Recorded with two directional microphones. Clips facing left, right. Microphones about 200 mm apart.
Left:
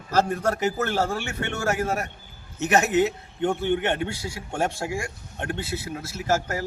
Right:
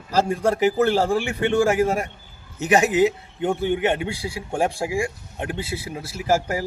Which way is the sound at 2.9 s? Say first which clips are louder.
Right 3 dB; 90° right.